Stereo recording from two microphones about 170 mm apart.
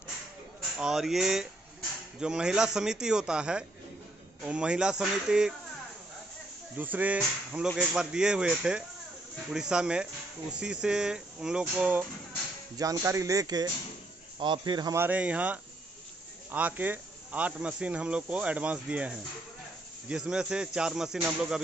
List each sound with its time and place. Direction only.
0.7 s speech: 5° right (ahead or behind)
6.8 s speech: 10° right (ahead or behind)
12.7 s speech: 20° right (ahead or behind)
15.0 s speech: 10° right (ahead or behind)